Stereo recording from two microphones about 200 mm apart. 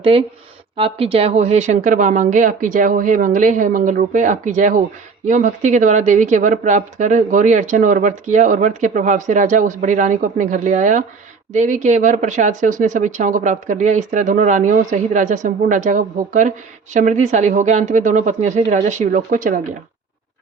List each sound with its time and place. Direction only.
0.0 s speech: 30° right (ahead or behind)